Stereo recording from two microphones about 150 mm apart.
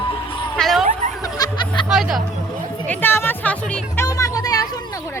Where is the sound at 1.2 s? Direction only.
25° left (ahead or behind).